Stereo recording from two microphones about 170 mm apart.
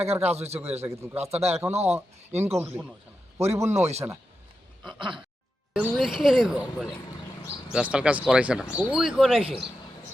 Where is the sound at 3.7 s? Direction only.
40° right (ahead or behind).